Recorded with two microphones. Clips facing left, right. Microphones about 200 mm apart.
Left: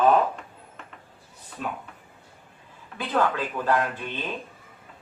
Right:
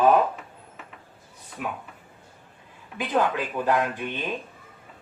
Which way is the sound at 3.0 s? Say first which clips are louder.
Right 1 dB; 15° right (ahead or behind).